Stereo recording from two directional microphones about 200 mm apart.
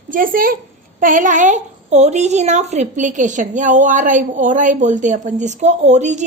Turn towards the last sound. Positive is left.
turn(degrees=-35)  # may be behind; listen again after turning